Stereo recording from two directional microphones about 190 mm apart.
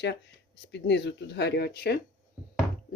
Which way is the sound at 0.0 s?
65° left (ahead or behind).